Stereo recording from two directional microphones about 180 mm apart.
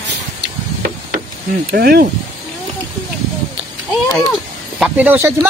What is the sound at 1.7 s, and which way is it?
Speech, 60° right (ahead or behind).